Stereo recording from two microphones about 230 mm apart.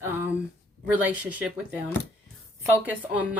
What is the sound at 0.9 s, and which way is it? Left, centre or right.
Speech, centre.